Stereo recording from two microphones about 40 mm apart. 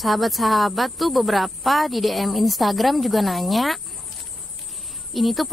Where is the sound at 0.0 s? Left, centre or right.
Centre.